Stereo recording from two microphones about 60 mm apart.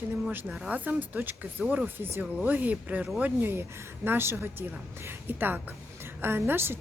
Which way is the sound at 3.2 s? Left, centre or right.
Right.